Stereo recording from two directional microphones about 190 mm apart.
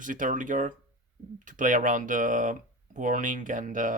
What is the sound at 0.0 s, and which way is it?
Speech, 45° right (ahead or behind).